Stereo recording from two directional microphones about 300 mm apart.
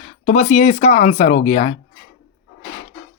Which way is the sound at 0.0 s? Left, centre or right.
Left.